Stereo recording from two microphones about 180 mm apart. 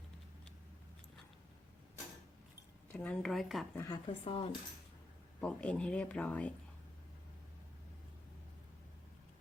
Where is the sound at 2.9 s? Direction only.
5° left (ahead or behind).